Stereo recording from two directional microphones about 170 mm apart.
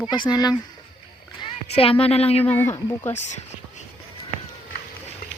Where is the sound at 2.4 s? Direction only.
10° left (ahead or behind).